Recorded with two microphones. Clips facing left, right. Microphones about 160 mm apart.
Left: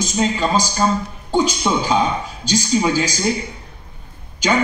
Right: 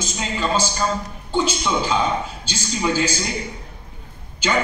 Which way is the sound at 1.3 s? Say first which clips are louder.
Left 3 dB; 40° left (ahead or behind).